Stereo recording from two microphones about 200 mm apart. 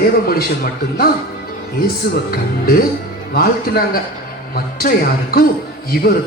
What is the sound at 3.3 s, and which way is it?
A man's voice, 50° left (ahead or behind).